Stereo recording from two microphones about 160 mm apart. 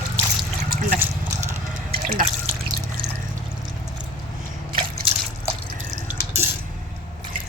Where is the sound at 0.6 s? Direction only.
65° right (ahead or behind).